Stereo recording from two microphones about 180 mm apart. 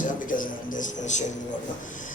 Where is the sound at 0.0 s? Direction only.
45° left (ahead or behind).